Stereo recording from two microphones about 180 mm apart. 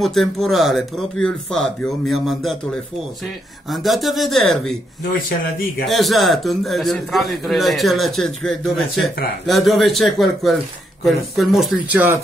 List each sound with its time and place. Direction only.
0.0 s a man's voice: centre (ahead or behind)
5.3 s a man's voice: 50° left (ahead or behind)
5.9 s a man's voice: centre (ahead or behind)